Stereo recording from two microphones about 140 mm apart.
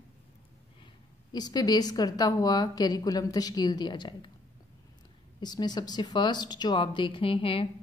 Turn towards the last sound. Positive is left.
turn(degrees=40)  # may be behind; listen again after turning